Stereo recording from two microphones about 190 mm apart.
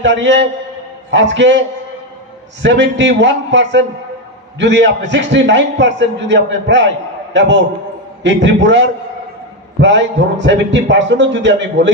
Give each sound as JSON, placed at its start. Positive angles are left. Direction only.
{"t": 0.0, "sound": "a man's voice", "side_deg": -70}